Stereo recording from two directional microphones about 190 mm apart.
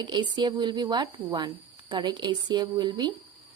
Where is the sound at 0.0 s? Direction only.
25° right (ahead or behind).